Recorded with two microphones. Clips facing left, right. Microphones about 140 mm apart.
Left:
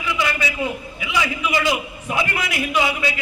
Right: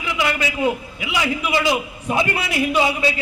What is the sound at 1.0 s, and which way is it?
A man's voice, 35° right (ahead or behind).